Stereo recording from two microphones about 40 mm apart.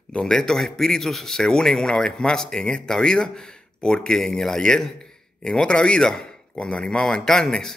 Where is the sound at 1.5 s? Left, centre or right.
Centre.